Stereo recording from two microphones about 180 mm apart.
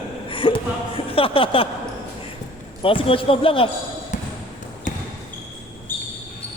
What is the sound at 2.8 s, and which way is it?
Speech, 30° left (ahead or behind).